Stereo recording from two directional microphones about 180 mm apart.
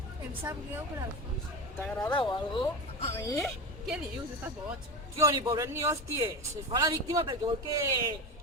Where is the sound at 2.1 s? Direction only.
25° left (ahead or behind).